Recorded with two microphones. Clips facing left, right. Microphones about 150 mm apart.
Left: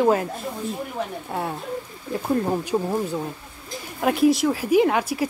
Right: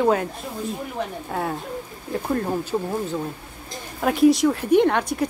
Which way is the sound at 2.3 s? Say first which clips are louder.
Left 2 dB; 15° left (ahead or behind).